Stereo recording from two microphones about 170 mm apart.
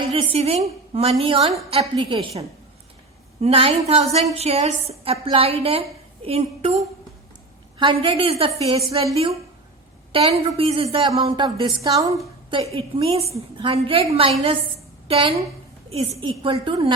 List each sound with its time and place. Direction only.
0.1 s a woman's voice: 35° right (ahead or behind)
3.4 s a woman's voice: 35° right (ahead or behind)
7.8 s a woman's voice: 30° right (ahead or behind)
10.1 s a woman's voice: 35° right (ahead or behind)
12.7 s a woman's voice: 30° right (ahead or behind)